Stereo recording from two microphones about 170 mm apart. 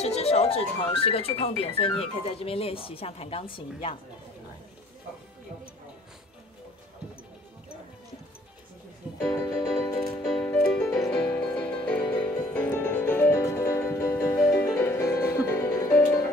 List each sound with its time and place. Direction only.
0.0 s speech: 40° left (ahead or behind)
9.2 s speech: 10° left (ahead or behind)
9.5 s music: 20° left (ahead or behind)